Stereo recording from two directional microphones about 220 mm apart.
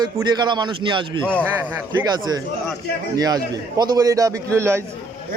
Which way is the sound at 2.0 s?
15° right (ahead or behind).